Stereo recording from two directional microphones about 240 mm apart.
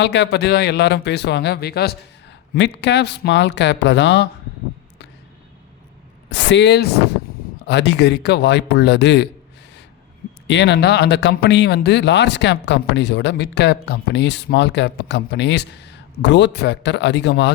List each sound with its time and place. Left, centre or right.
0.0 s speech: left
6.3 s speech: left
10.4 s speech: left